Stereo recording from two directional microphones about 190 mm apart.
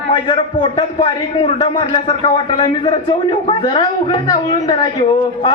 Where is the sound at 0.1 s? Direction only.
25° left (ahead or behind).